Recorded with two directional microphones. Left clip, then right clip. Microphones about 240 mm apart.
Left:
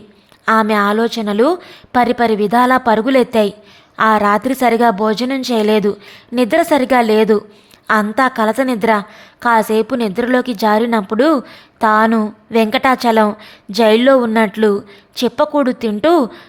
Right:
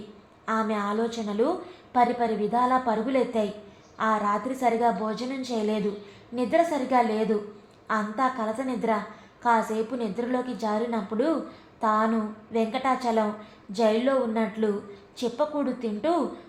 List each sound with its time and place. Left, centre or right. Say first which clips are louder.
0.4 s a woman's voice: left 15 dB; left